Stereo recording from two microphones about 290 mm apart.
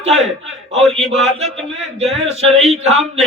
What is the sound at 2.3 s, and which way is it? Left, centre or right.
Speech, right.